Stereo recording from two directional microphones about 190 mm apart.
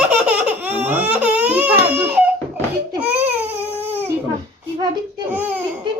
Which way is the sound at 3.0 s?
10° right (ahead or behind).